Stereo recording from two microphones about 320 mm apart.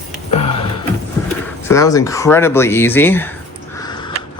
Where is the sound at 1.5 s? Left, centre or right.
Centre.